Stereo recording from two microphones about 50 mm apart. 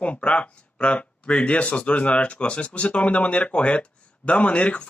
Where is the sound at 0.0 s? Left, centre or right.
Left.